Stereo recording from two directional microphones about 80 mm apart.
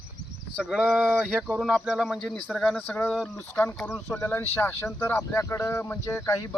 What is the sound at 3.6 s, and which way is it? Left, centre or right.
Speech, left.